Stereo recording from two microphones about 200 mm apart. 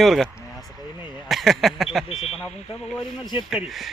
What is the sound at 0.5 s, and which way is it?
Vehicle, 20° left (ahead or behind).